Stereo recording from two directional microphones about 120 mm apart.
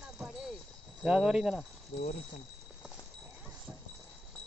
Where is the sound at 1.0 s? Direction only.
5° right (ahead or behind).